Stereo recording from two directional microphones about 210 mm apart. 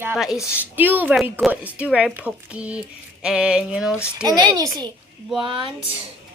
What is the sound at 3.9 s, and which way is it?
Speech, 10° left (ahead or behind).